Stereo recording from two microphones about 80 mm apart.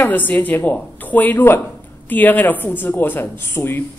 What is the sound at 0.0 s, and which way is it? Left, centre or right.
Speech, left.